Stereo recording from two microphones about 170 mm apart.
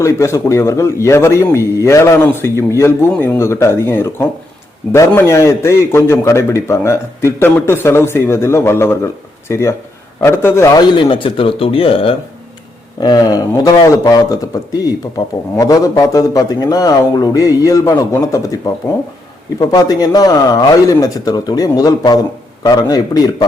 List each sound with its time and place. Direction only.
0.0 s a man's voice: 15° left (ahead or behind); by 12.1 s 35° left (ahead or behind)
13.0 s a man's voice: 25° left (ahead or behind)